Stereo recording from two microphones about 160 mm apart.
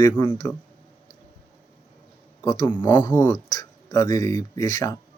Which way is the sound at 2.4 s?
25° left (ahead or behind).